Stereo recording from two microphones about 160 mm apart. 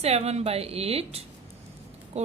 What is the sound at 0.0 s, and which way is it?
A woman's voice, 40° right (ahead or behind).